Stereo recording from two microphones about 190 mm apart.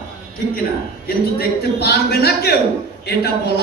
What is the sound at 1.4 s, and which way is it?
A man's voice, 55° left (ahead or behind).